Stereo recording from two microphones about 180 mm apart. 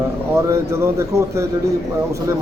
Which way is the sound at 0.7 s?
15° right (ahead or behind).